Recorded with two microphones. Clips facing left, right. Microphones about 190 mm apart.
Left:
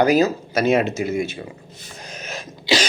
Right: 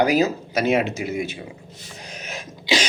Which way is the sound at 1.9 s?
15° right (ahead or behind).